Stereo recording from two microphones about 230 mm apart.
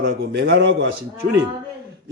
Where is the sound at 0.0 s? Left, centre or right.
Right.